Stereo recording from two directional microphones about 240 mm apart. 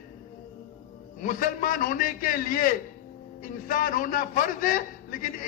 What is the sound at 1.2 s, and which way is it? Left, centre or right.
A man's voice, left.